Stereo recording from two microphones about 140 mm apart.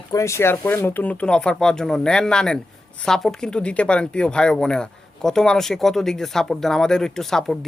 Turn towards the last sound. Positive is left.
turn(degrees=5)  # may be behind; listen again after turning